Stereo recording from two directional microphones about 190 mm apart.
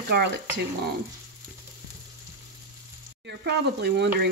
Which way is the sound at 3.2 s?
60° right (ahead or behind).